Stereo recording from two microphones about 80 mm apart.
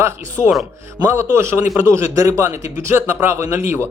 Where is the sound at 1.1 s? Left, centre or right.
Right.